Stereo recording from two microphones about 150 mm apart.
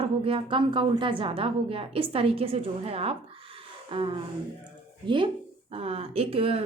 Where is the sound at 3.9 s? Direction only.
35° right (ahead or behind).